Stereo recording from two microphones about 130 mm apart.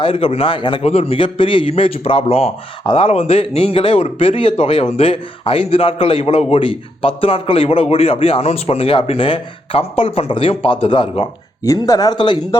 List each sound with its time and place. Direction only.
0.0 s speech: 40° left (ahead or behind)
0.8 s a man's voice: 50° left (ahead or behind)
11.6 s speech: 25° left (ahead or behind)